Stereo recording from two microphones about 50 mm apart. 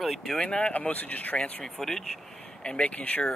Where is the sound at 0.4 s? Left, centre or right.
Left.